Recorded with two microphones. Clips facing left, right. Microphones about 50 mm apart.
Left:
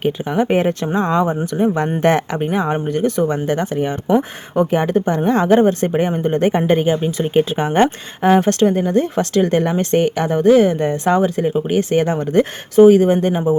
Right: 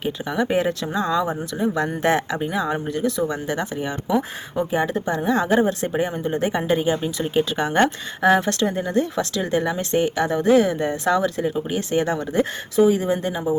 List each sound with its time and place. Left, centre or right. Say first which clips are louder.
0.0 s speech: left 6 dB; left
4.5 s speech: left 6 dB; left
7.5 s speech: left 4 dB; left
12.3 s speech: left 6 dB; left